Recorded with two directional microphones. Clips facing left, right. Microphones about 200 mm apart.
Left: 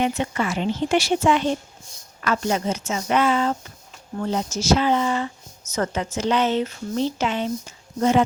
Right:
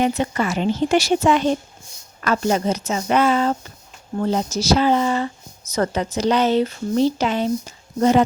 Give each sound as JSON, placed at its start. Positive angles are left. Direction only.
{"t": 0.0, "sound": "speech", "side_deg": -40}